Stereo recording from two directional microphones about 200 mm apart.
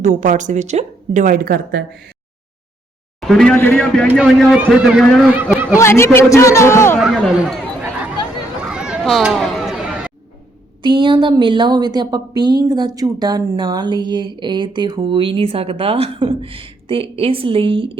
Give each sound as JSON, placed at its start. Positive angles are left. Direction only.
{"t": 0.0, "sound": "speech", "side_deg": -35}
{"t": 3.2, "sound": "a man's voice", "side_deg": 0}
{"t": 4.1, "sound": "a man's voice", "side_deg": -5}
{"t": 5.7, "sound": "a man's voice", "side_deg": 15}
{"t": 7.0, "sound": "a man's voice", "side_deg": 0}
{"t": 8.6, "sound": "a sound", "side_deg": -5}
{"t": 10.8, "sound": "speech", "side_deg": -25}